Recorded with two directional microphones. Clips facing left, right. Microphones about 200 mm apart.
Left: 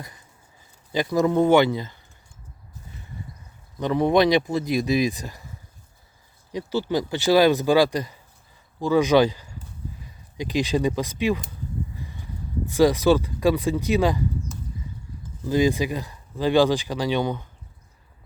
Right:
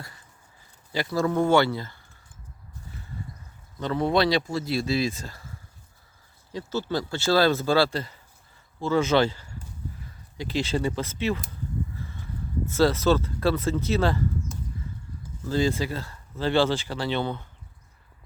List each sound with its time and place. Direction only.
0.9 s speech: 20° left (ahead or behind)
3.8 s speech: 15° left (ahead or behind)
6.5 s speech: 15° left (ahead or behind)
15.4 s speech: 15° left (ahead or behind)